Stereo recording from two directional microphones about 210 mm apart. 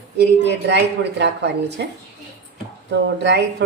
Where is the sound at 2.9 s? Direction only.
55° right (ahead or behind).